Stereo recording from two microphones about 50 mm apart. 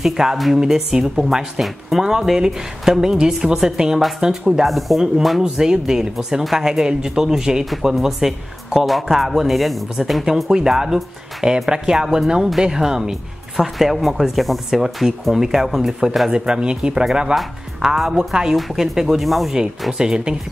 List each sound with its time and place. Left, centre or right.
0.0 s speech: centre
16.3 s speech: centre
20.0 s speech: centre